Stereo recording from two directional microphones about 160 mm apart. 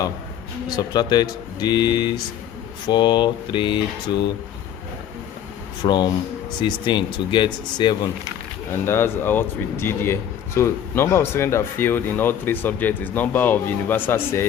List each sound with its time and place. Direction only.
0.7 s speech: 25° left (ahead or behind)
5.8 s speech: 30° left (ahead or behind)
8.7 s speech: 15° left (ahead or behind)